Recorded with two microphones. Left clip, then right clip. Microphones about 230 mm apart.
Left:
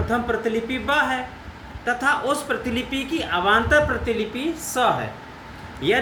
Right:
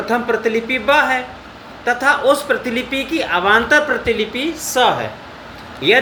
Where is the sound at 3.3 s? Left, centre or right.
Left.